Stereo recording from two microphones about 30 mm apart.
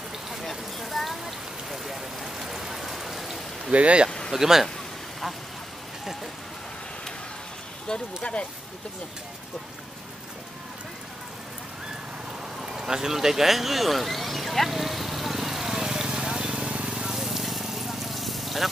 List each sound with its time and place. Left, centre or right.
0.3 s a sound: centre
1.2 s rain: centre
3.7 s speech: right
4.3 s speech: centre
8.2 s speech: left
12.6 s speech: centre
14.7 s vehicle: centre
15.7 s vehicle: right
17.1 s fire: centre